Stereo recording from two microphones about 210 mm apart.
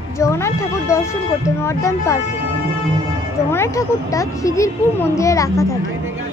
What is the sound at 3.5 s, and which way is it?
Speech, 15° left (ahead or behind).